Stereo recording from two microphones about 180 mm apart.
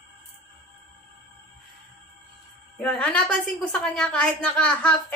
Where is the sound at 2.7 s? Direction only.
5° left (ahead or behind).